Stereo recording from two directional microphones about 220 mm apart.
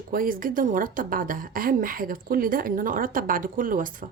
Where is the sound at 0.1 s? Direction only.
40° right (ahead or behind).